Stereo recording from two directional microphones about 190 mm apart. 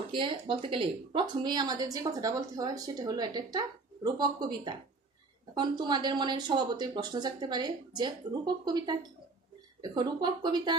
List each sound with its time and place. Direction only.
0.1 s speech: 25° right (ahead or behind)